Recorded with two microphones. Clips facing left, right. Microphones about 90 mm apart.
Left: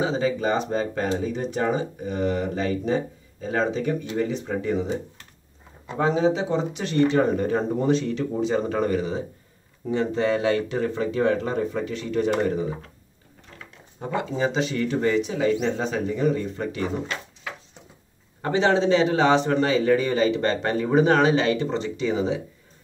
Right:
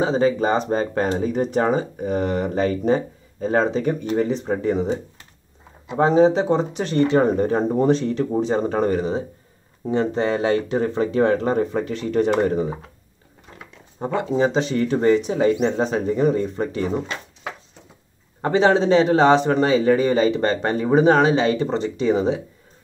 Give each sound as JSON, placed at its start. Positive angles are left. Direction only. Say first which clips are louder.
{"t": 0.0, "sound": "speech", "louder": "right 5 dB", "side_deg": -40}
{"t": 5.9, "sound": "speech", "louder": "right 6 dB", "side_deg": -40}
{"t": 13.9, "sound": "speech", "louder": "right 5 dB", "side_deg": -30}
{"t": 18.6, "sound": "speech", "louder": "right 3 dB", "side_deg": -45}